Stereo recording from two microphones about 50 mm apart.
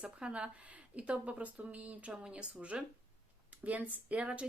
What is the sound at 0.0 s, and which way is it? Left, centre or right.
Speech, right.